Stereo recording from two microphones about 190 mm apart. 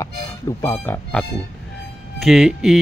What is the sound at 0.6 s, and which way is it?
Speech, 10° left (ahead or behind).